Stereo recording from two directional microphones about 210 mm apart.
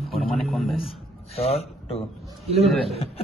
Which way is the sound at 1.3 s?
30° left (ahead or behind).